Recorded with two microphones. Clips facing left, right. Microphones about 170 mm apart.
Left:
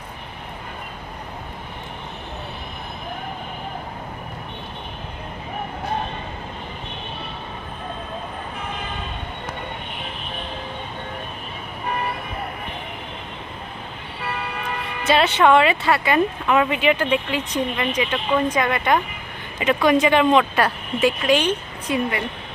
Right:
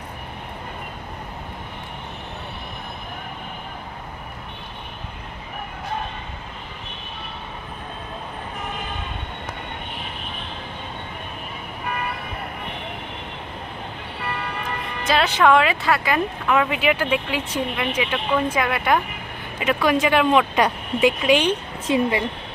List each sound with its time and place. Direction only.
15.0 s music: centre (ahead or behind)
15.4 s a woman's voice: centre (ahead or behind)
21.8 s a woman's voice: 25° right (ahead or behind)